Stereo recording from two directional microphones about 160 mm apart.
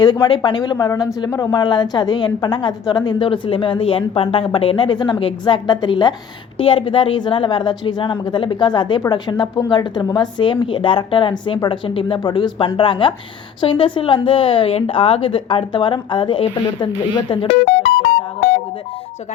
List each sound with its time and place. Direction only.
0.0 s a woman's voice: 25° left (ahead or behind)
18.0 s music: 75° left (ahead or behind)